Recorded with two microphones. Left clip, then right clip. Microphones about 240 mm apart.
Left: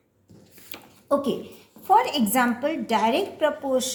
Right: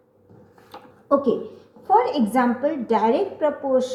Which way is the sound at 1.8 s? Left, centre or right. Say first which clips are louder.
Right 1 dB; left.